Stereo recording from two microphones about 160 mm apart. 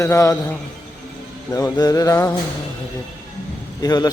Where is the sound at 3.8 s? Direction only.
25° left (ahead or behind).